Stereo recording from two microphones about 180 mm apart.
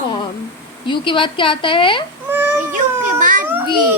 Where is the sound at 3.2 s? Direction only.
45° right (ahead or behind).